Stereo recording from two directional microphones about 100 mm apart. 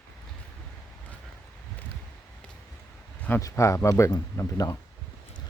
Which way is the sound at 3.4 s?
35° left (ahead or behind).